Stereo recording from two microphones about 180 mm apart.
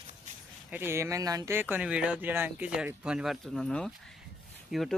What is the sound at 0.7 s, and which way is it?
Speech, 15° right (ahead or behind).